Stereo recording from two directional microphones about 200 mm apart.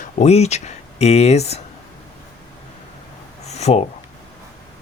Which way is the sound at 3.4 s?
35° left (ahead or behind).